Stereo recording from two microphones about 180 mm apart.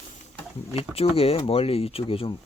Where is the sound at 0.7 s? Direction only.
30° left (ahead or behind).